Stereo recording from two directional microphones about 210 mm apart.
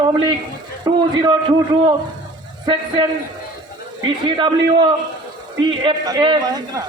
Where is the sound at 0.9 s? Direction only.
20° right (ahead or behind).